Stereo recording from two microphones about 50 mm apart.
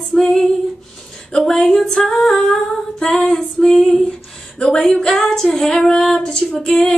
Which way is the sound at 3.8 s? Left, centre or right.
Centre.